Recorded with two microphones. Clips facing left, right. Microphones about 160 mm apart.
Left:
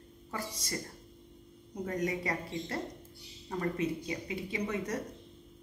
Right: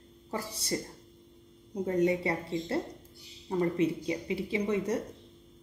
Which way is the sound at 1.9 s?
30° right (ahead or behind).